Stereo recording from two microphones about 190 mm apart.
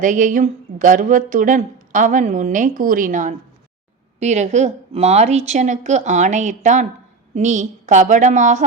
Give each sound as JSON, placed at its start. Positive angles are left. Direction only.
{"t": 0.0, "sound": "a woman's voice", "side_deg": -45}